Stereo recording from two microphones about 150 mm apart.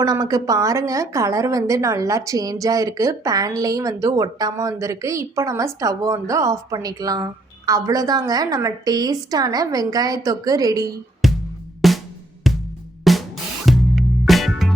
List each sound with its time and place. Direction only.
0.0 s a woman's voice: 25° right (ahead or behind)
11.2 s music: centre (ahead or behind)
13.1 s drum: centre (ahead or behind)
13.7 s music: centre (ahead or behind)